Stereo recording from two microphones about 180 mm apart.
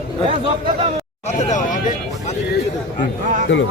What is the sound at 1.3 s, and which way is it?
Speech, 40° left (ahead or behind).